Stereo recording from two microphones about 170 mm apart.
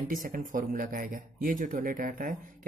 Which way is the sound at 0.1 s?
55° right (ahead or behind).